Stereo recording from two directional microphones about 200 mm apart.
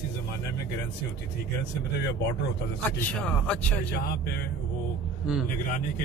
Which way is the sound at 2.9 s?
5° left (ahead or behind).